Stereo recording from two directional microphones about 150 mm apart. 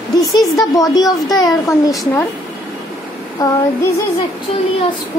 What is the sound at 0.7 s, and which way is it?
Speech, 25° left (ahead or behind).